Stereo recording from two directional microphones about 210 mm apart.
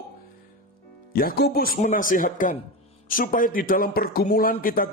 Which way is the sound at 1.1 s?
45° left (ahead or behind).